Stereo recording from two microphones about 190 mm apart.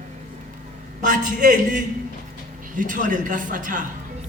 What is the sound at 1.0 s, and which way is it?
A man's voice, 45° right (ahead or behind).